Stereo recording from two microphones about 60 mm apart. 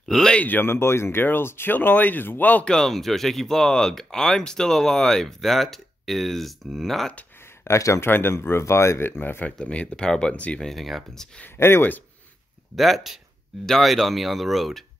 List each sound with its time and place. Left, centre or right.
0.0 s speech: centre
0.3 s speech: left
0.6 s speech: left
2.7 s speech: centre
7.6 s speech: left
8.1 s speech: left
9.6 s speech: centre
10.6 s speech: centre
11.4 s speech: left
12.7 s speech: centre